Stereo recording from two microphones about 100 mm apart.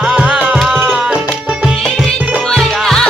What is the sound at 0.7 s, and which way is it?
Music, 15° right (ahead or behind).